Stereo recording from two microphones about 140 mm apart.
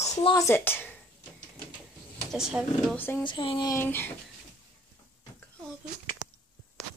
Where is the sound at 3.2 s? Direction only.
35° left (ahead or behind).